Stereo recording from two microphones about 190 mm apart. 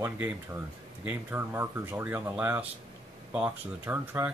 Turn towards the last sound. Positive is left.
turn(degrees=-10)  # may be behind; listen again after turning